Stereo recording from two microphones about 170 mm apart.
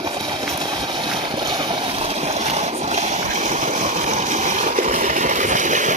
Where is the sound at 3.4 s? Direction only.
45° right (ahead or behind).